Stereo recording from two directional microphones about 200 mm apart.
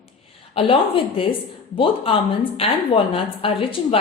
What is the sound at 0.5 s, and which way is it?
A woman's voice, 25° left (ahead or behind).